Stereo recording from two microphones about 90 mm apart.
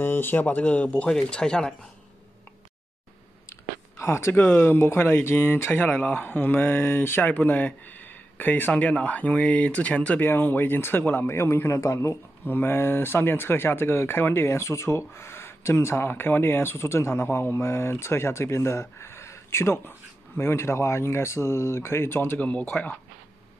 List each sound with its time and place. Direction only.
0.0 s speech: 25° left (ahead or behind)
4.0 s speech: 30° left (ahead or behind)